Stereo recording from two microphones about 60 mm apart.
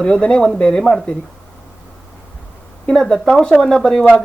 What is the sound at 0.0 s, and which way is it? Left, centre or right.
Speech, centre.